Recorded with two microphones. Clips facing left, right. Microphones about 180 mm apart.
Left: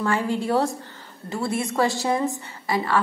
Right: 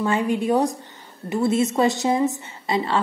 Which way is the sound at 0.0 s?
20° right (ahead or behind).